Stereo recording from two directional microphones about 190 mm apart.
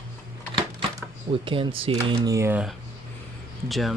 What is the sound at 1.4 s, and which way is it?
Speech, 30° right (ahead or behind).